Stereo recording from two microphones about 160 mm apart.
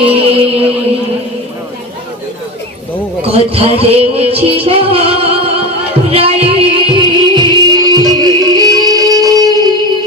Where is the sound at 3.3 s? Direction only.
35° right (ahead or behind).